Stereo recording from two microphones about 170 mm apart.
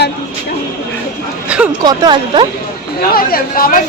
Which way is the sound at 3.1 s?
60° left (ahead or behind).